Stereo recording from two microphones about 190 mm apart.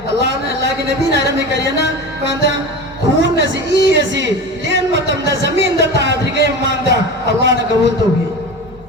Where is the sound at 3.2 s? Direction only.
70° right (ahead or behind).